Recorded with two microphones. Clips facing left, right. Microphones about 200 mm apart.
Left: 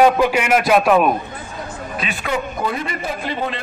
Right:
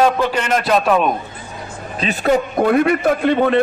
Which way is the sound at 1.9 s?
35° right (ahead or behind).